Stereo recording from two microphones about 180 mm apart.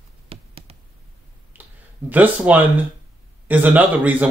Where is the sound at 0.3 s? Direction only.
35° right (ahead or behind).